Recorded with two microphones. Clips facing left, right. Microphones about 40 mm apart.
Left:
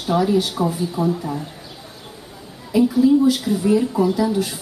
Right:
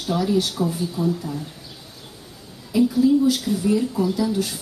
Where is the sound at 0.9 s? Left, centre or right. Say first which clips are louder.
Left 3 dB; left.